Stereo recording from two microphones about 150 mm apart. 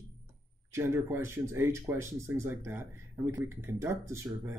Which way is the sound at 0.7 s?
15° right (ahead or behind).